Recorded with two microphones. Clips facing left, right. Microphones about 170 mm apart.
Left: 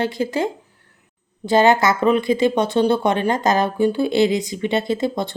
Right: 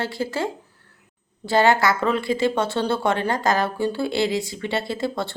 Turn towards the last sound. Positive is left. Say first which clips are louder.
# left 4 dB
turn(degrees=20)  # may be behind; listen again after turning